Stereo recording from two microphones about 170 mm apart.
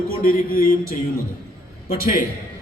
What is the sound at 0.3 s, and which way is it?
A man's voice, 55° left (ahead or behind).